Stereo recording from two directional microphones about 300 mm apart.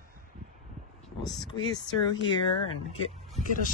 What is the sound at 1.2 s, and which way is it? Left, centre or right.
Speech, centre.